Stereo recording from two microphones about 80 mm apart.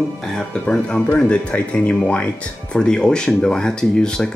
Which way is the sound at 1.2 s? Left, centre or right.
Centre.